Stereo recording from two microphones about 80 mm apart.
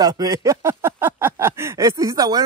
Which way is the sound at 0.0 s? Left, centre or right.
Right.